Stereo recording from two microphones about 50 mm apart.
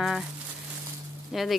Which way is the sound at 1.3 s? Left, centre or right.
Centre.